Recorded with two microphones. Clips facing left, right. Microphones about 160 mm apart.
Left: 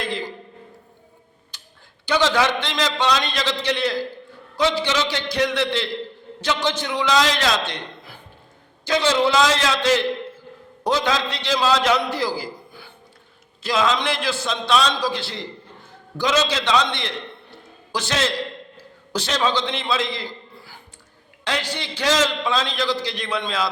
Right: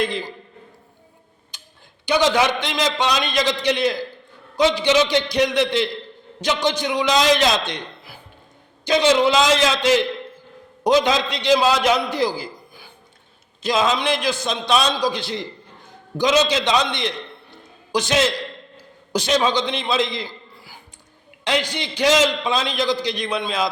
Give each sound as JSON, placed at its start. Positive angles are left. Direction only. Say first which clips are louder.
{"t": 1.5, "sound": "tick-tock", "louder": "right 1 dB", "side_deg": -15}
{"t": 2.0, "sound": "a man's voice", "louder": "right 2 dB", "side_deg": -15}
{"t": 21.4, "sound": "a man's voice", "louder": "right 4 dB", "side_deg": -15}